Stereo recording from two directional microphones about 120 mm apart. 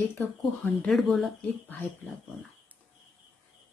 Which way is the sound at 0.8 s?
5° left (ahead or behind).